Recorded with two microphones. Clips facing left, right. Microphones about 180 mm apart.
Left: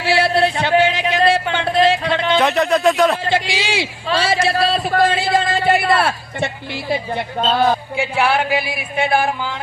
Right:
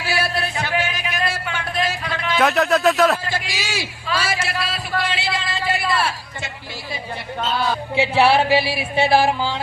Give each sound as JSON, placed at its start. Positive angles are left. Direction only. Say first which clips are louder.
{"t": 0.0, "sound": "music", "louder": "left 8 dB", "side_deg": 30}
{"t": 2.4, "sound": "speech", "louder": "right 1 dB", "side_deg": 0}
{"t": 3.2, "sound": "a sound", "louder": "left 7 dB", "side_deg": 25}
{"t": 7.4, "sound": "a man's voice", "louder": "left 6 dB", "side_deg": 55}
{"t": 7.9, "sound": "speech", "louder": "right 2 dB", "side_deg": -30}